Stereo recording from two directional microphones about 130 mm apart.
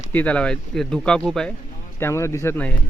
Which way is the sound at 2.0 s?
20° left (ahead or behind).